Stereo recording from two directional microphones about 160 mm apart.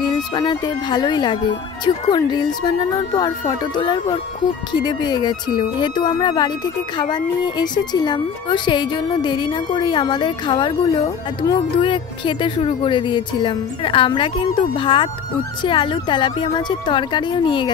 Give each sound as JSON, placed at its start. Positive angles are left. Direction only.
{"t": 0.0, "sound": "speech", "side_deg": 25}